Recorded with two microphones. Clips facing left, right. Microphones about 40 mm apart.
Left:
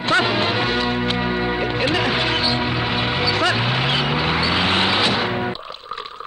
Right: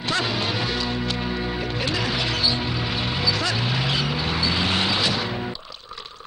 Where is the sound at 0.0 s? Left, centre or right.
Left.